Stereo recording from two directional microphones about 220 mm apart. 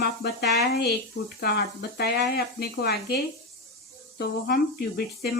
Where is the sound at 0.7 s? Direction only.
45° left (ahead or behind).